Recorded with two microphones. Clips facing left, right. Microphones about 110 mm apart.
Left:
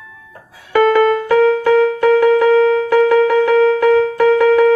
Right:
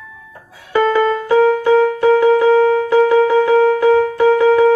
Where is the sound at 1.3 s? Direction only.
20° right (ahead or behind).